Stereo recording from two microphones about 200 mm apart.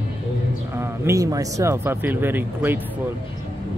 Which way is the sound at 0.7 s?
10° right (ahead or behind).